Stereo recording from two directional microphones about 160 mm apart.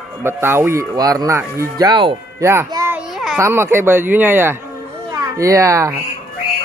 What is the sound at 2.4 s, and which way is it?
A child's voice, 15° right (ahead or behind).